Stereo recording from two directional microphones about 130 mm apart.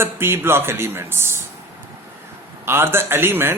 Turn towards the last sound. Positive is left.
turn(degrees=-15)  # may be behind; listen again after turning